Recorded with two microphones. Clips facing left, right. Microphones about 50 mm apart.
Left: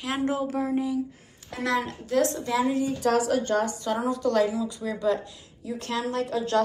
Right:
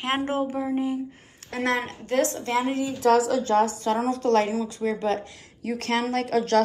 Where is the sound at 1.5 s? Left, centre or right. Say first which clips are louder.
Right 1 dB; right.